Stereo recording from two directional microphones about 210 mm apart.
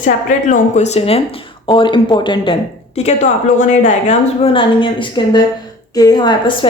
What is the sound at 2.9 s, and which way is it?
A woman's voice, 35° left (ahead or behind).